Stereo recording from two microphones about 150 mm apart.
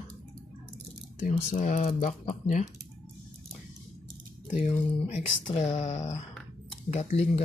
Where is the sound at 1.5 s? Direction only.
60° left (ahead or behind).